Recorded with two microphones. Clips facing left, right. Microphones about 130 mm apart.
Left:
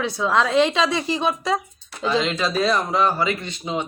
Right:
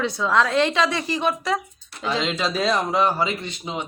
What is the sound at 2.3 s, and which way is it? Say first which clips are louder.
Speech: left 2 dB; centre (ahead or behind).